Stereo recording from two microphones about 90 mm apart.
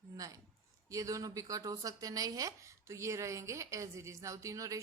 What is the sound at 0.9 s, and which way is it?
A woman's voice, 40° right (ahead or behind).